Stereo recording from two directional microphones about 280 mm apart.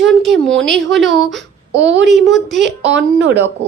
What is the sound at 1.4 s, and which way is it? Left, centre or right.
Speech, right.